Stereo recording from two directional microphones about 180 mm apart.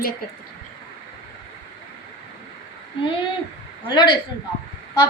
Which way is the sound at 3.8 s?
25° left (ahead or behind).